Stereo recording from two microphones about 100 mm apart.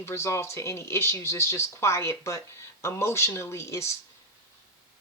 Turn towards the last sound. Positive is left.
turn(degrees=30)  # may be behind; listen again after turning